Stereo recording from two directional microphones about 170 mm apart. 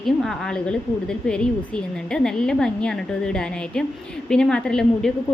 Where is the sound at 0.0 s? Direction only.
Centre (ahead or behind).